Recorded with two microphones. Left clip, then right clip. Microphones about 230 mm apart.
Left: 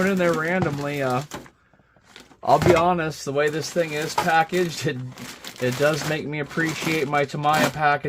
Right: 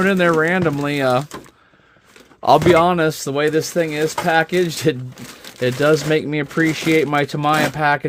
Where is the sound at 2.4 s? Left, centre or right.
Right.